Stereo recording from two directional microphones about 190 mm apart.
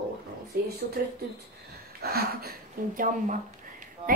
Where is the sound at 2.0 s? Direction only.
55° right (ahead or behind).